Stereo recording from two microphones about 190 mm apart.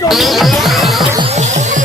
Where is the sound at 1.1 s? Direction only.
30° right (ahead or behind).